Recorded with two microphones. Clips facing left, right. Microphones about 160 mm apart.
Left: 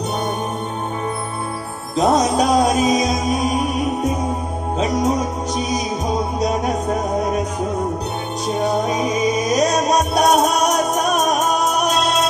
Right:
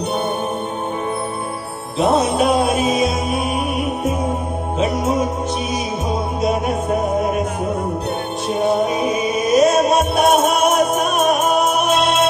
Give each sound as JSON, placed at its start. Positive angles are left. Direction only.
{"t": 2.0, "sound": "music", "side_deg": 40}
{"t": 8.6, "sound": "music", "side_deg": 35}